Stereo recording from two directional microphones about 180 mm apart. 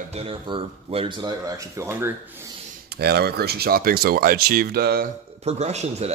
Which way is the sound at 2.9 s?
65° right (ahead or behind).